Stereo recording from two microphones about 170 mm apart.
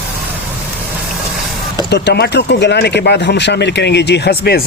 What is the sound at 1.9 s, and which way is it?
Speech, 85° left.